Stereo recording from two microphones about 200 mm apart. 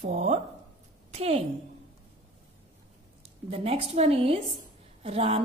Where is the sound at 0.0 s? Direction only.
35° right (ahead or behind).